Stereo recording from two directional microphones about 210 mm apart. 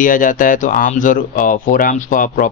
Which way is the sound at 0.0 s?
40° left (ahead or behind).